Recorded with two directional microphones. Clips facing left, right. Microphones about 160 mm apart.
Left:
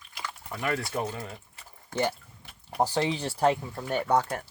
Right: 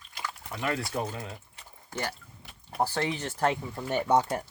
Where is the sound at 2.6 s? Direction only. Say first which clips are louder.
Left 3 dB; 15° left (ahead or behind).